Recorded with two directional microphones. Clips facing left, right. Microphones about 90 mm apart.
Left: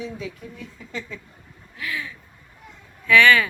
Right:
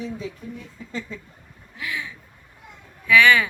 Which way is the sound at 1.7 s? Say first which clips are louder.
Even; 15° right (ahead or behind).